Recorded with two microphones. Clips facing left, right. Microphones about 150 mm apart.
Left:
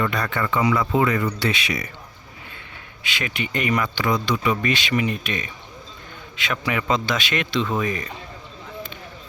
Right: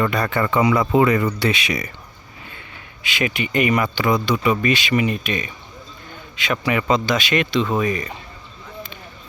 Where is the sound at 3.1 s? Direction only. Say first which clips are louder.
Right 5 dB; 10° right (ahead or behind).